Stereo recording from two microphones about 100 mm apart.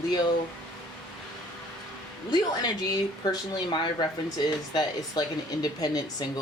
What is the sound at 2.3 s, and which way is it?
Speech, 45° left (ahead or behind).